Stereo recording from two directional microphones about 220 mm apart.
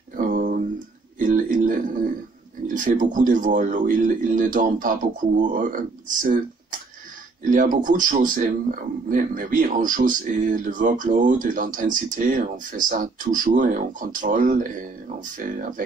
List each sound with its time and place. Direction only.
0.1 s a sound: 40° right (ahead or behind)
1.2 s music: 35° right (ahead or behind)
2.7 s a man's voice: 35° right (ahead or behind)